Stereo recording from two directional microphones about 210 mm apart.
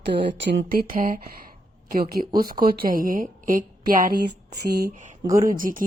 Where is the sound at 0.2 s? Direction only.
55° right (ahead or behind).